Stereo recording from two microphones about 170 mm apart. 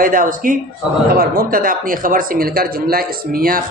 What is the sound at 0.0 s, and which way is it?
A man's voice, 55° right (ahead or behind).